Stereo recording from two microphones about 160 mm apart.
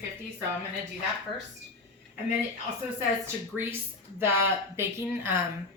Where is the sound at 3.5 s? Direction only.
15° right (ahead or behind).